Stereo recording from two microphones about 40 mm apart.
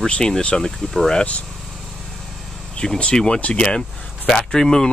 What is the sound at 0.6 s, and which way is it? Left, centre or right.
Speech, centre.